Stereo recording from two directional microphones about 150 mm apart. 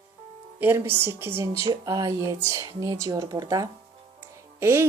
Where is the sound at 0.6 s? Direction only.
15° right (ahead or behind).